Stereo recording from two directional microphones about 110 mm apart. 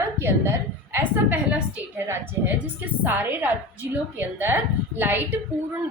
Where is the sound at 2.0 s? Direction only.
20° right (ahead or behind).